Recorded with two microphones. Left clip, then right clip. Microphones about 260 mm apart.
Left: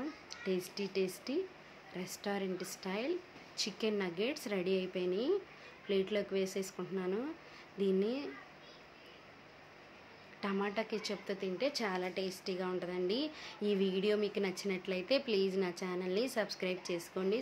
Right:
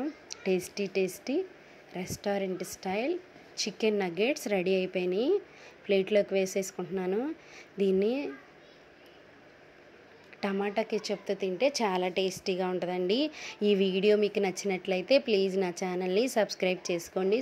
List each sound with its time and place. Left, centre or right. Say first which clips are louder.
0.3 s a woman's voice: right 8 dB; right
10.4 s a woman's voice: right 6 dB; centre